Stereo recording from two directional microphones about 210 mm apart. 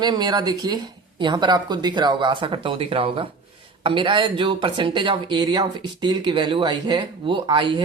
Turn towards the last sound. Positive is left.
turn(degrees=-20)  # may be behind; listen again after turning